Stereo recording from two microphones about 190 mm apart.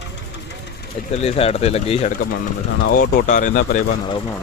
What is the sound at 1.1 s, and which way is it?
Speech, 35° left (ahead or behind).